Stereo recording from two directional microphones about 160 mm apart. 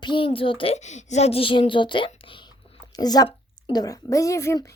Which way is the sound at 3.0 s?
25° left (ahead or behind).